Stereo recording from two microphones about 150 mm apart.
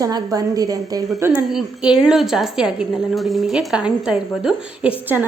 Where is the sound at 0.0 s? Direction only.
25° right (ahead or behind).